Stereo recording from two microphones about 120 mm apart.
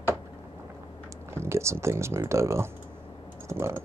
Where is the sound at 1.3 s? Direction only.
20° right (ahead or behind).